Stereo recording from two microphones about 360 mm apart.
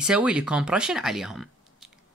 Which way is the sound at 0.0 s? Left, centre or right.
Centre.